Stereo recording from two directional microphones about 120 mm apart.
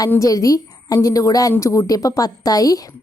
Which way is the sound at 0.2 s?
30° left (ahead or behind).